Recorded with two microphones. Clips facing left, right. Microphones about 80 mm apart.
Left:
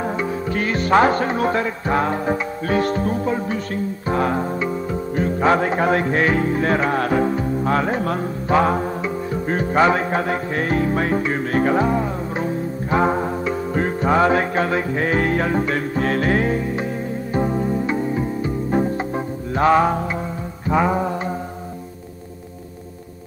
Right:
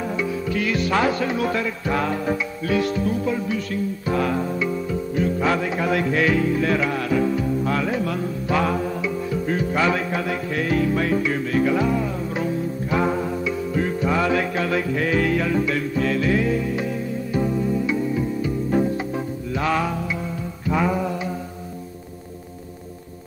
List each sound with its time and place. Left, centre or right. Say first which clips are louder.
0.0 s speech: left 2 dB; left
20.6 s music: left 3 dB; left